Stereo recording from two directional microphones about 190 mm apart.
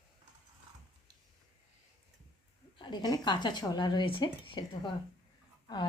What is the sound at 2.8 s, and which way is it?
A woman's voice, 25° left (ahead or behind).